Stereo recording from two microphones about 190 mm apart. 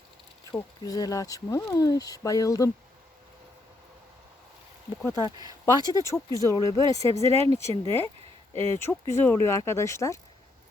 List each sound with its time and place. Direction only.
0.5 s speech: 20° left (ahead or behind)
5.0 s speech: 20° left (ahead or behind)